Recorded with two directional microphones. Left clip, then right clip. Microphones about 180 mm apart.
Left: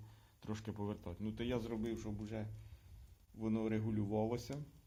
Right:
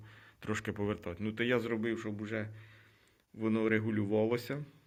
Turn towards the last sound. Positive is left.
turn(degrees=-10)  # may be behind; listen again after turning